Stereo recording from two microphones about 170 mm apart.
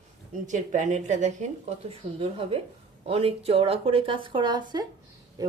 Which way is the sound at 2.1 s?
35° right (ahead or behind).